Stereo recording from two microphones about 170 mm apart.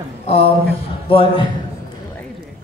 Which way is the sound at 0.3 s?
40° left (ahead or behind).